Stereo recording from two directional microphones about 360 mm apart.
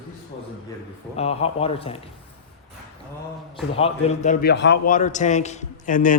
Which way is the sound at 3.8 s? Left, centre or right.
Centre.